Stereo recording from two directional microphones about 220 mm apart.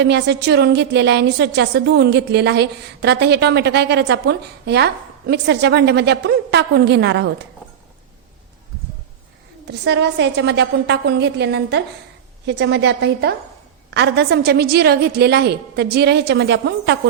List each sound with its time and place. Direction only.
0.0 s a woman's voice: 50° right (ahead or behind)
9.8 s a woman's voice: 50° right (ahead or behind)